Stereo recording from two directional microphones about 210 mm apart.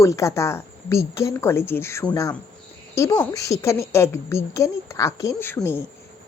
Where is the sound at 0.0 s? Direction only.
15° left (ahead or behind).